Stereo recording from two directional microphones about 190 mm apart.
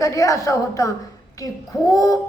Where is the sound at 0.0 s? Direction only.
15° left (ahead or behind).